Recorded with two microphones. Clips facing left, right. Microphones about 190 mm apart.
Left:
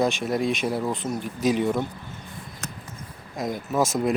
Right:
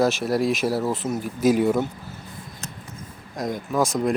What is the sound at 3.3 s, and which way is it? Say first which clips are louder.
Speech: right 1 dB; centre (ahead or behind).